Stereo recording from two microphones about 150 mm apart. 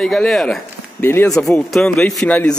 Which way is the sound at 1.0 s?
15° left (ahead or behind).